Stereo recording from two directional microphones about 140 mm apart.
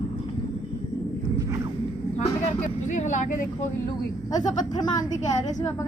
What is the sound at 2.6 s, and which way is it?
Speech, 60° left (ahead or behind).